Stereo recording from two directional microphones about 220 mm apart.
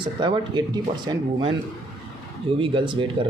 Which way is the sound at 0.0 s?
20° right (ahead or behind).